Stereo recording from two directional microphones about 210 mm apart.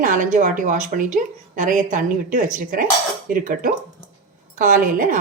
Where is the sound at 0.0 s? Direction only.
40° right (ahead or behind).